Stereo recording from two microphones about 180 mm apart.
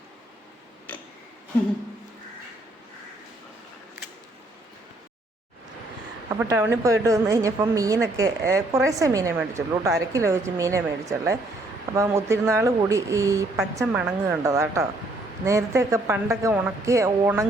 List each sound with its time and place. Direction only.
0.9 s clock: 10° left (ahead or behind)
6.4 s speech: 10° right (ahead or behind)